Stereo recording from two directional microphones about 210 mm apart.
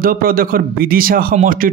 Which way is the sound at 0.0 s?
45° right (ahead or behind).